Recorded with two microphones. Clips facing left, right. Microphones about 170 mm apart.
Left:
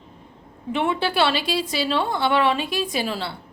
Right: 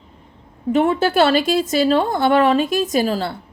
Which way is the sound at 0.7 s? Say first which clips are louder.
Right 7 dB; 40° right (ahead or behind).